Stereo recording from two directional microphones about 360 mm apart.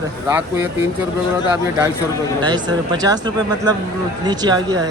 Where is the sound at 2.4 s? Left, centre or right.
Centre.